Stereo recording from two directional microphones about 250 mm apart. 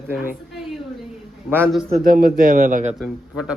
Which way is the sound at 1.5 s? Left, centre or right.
Centre.